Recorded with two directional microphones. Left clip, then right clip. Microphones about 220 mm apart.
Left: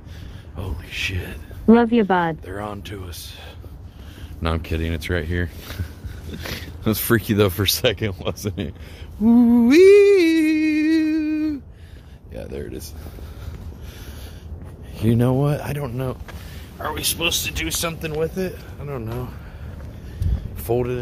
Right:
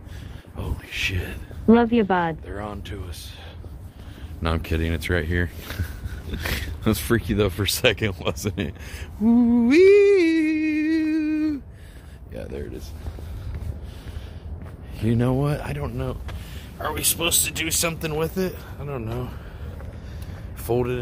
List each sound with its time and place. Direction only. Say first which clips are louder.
0.6 s a sound: left 1 dB; 10° left (ahead or behind)
1.7 s speech: left 2 dB; 25° left (ahead or behind)
4.6 s speech: even; 5° right (ahead or behind)
7.0 s speech: left 6 dB; 20° left (ahead or behind)
7.8 s speech: even; 5° left (ahead or behind)
9.2 s humming: left 4 dB; 20° left (ahead or behind)
11.1 s a sound: left 1 dB; 5° left (ahead or behind)
15.0 s speech: left 3 dB; 15° left (ahead or behind)
16.7 s speech: left 1 dB; 5° right (ahead or behind)
20.6 s speech: left 2 dB; 5° left (ahead or behind)